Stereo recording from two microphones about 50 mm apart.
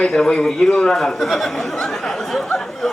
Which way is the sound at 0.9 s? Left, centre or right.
Centre.